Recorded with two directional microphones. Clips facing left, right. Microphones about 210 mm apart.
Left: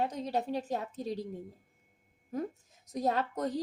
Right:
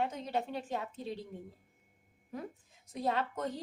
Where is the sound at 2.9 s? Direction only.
40° left (ahead or behind).